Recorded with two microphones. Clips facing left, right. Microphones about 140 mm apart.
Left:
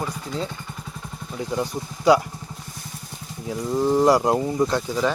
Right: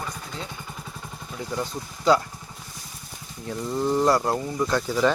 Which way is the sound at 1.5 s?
15° left (ahead or behind).